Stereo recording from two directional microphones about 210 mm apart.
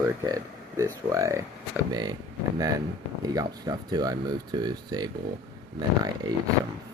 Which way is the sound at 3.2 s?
15° right (ahead or behind).